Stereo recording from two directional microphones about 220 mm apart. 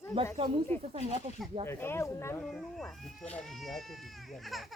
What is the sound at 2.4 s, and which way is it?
Speech, centre (ahead or behind).